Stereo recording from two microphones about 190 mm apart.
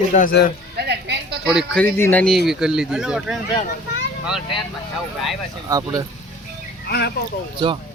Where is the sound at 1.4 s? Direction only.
5° right (ahead or behind).